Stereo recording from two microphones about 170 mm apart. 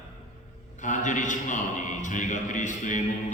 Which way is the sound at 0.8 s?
45° left (ahead or behind).